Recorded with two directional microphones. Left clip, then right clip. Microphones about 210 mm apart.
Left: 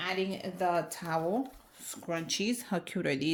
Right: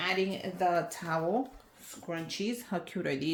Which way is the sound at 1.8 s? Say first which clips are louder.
Left 3 dB; 50° left (ahead or behind).